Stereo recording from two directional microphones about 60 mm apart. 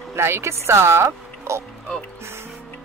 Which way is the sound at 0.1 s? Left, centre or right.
Right.